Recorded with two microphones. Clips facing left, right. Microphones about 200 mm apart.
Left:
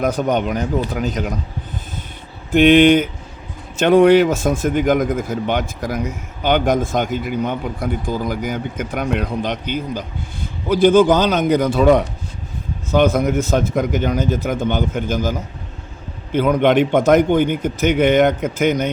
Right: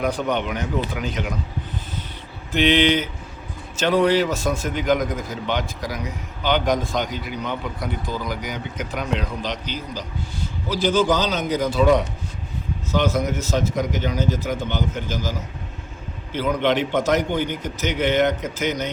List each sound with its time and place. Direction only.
0.0 s speech: 45° left (ahead or behind)
2.5 s speech: 50° left (ahead or behind)